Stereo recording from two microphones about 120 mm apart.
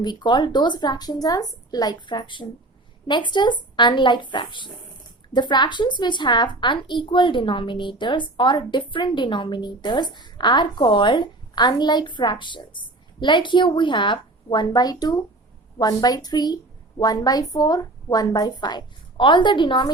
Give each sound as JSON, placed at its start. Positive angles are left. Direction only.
{"t": 0.0, "sound": "a woman's voice", "side_deg": 40}